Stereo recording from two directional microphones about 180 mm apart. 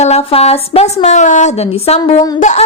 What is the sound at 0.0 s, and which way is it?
Speech, 35° left (ahead or behind).